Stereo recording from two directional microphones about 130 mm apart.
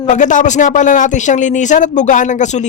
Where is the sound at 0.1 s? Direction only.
75° left (ahead or behind).